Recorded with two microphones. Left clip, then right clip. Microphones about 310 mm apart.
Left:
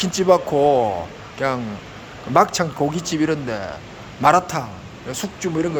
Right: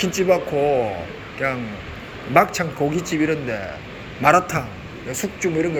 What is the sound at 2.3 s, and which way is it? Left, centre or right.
Speech, centre.